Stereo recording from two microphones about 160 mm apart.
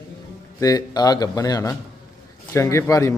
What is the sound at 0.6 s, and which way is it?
A man's voice, 25° left (ahead or behind).